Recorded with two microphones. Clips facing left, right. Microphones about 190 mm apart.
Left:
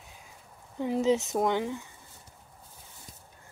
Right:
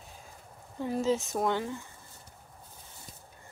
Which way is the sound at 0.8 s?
20° left (ahead or behind).